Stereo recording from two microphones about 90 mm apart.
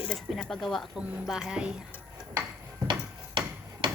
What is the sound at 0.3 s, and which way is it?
Speech, 5° left (ahead or behind).